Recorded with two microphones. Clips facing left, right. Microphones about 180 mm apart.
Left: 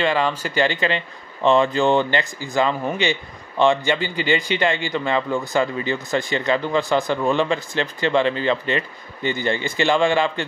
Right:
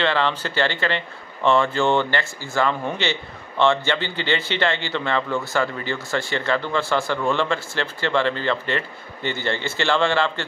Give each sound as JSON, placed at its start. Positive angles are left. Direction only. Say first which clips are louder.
{"t": 0.0, "sound": "speech", "louder": "left 1 dB", "side_deg": 10}